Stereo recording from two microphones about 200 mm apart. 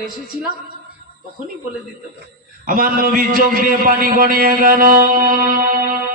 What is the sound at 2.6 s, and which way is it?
A man's voice, 45° right (ahead or behind).